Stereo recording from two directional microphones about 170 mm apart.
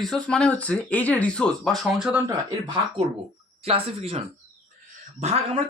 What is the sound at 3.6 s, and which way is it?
Speech, 35° right (ahead or behind).